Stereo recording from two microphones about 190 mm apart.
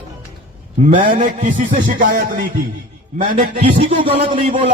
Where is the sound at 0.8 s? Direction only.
50° right (ahead or behind).